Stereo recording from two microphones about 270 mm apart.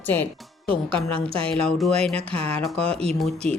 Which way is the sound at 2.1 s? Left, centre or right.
Right.